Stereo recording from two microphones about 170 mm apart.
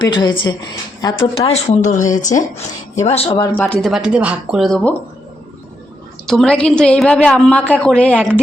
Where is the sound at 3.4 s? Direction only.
10° left (ahead or behind).